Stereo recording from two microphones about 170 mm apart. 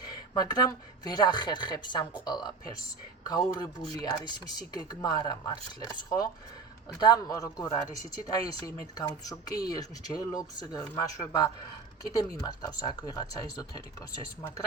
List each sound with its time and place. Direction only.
0.3 s speech: 25° left (ahead or behind)